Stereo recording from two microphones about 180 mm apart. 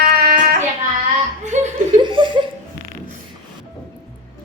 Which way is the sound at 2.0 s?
25° right (ahead or behind).